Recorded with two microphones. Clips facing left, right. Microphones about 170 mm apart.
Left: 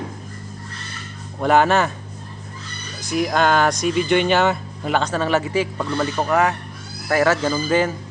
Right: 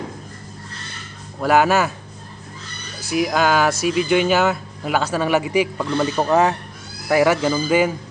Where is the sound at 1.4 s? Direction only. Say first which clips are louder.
Even; 5° right (ahead or behind).